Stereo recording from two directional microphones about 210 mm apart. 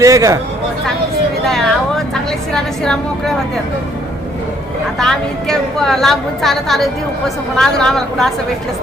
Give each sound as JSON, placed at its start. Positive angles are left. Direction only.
{"t": 0.0, "sound": "speech", "side_deg": -15}
{"t": 1.5, "sound": "a sound", "side_deg": 0}
{"t": 2.5, "sound": "a woman's voice", "side_deg": 5}
{"t": 4.9, "sound": "a woman's voice", "side_deg": 0}